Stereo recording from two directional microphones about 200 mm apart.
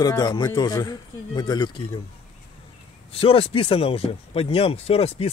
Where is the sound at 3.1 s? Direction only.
30° left (ahead or behind).